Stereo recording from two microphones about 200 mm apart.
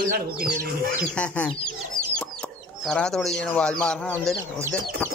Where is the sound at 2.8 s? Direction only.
5° left (ahead or behind).